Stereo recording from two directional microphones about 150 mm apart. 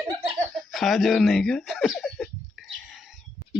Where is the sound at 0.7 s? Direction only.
Centre (ahead or behind).